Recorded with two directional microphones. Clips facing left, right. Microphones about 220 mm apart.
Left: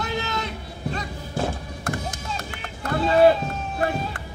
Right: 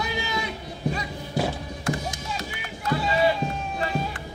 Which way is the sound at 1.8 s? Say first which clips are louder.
Right 1 dB; 55° left (ahead or behind).